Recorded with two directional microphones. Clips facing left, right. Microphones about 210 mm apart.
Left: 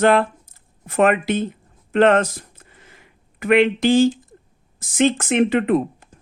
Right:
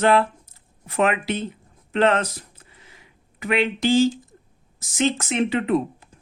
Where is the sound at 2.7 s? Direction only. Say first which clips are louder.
Left 2 dB; 50° left (ahead or behind).